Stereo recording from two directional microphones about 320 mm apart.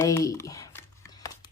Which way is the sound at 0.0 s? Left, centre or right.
Centre.